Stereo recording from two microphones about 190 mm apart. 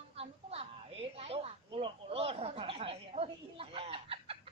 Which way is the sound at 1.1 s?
30° right (ahead or behind).